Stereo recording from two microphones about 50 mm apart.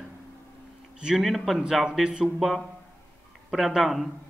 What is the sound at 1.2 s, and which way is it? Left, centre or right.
A man's voice, centre.